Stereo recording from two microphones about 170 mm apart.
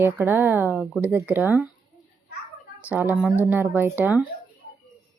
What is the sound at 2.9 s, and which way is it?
A woman's voice, 10° right (ahead or behind).